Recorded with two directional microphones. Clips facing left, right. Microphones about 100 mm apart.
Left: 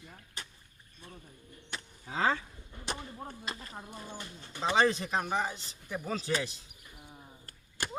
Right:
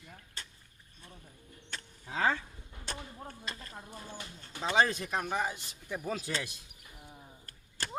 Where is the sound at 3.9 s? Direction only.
5° right (ahead or behind).